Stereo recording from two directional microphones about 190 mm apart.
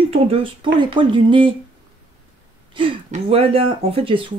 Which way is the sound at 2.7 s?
30° right (ahead or behind).